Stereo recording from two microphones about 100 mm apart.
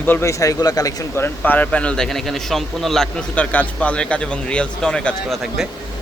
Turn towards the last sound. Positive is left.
turn(degrees=10)  # may be behind; listen again after turning